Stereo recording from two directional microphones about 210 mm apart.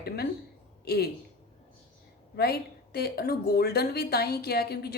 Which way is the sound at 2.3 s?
50° left (ahead or behind).